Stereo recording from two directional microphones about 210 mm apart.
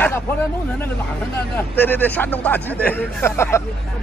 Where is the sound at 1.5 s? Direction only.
10° left (ahead or behind).